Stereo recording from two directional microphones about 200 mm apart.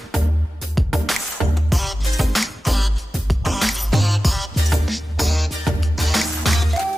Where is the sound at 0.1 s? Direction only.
Centre (ahead or behind).